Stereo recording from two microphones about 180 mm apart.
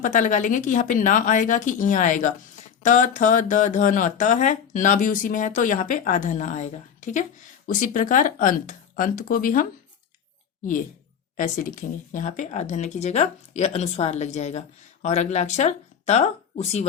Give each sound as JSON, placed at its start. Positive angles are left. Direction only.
{"t": 0.0, "sound": "speech", "side_deg": 45}